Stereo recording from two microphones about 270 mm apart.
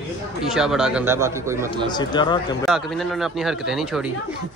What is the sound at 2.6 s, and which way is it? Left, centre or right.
Speech, centre.